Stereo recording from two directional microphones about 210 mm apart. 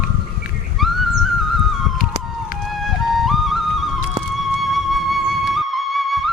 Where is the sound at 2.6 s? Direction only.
Centre (ahead or behind).